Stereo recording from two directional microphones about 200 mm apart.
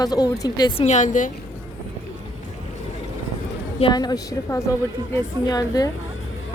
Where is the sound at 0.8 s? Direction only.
35° left (ahead or behind).